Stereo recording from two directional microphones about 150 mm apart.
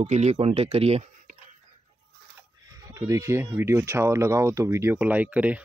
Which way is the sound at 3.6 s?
20° right (ahead or behind).